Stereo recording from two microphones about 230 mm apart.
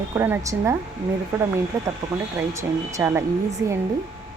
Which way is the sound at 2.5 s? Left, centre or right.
Centre.